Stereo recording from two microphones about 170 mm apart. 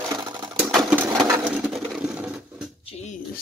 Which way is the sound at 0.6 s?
5° left (ahead or behind).